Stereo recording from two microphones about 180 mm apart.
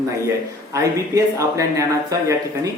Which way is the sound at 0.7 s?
15° right (ahead or behind).